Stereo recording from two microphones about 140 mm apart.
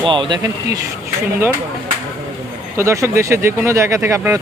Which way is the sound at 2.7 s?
20° right (ahead or behind).